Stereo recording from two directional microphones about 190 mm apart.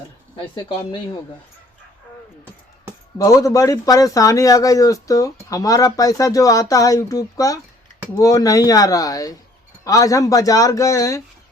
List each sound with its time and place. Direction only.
0.3 s speech: 25° left (ahead or behind)
3.2 s speech: 15° left (ahead or behind)